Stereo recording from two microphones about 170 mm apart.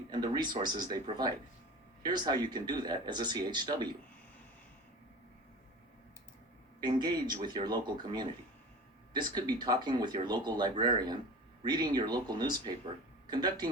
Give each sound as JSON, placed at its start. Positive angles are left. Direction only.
{"t": 0.1, "sound": "speech", "side_deg": -25}
{"t": 6.7, "sound": "speech", "side_deg": -25}